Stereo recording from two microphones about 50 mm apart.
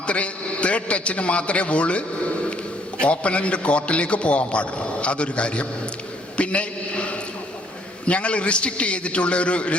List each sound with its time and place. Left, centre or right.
0.1 s a man's voice: left